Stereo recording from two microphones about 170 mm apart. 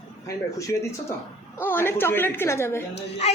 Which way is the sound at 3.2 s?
40° left (ahead or behind).